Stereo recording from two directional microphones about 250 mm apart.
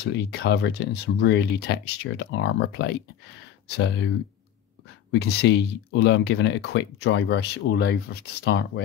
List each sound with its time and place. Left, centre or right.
0.0 s speech: left
5.1 s speech: left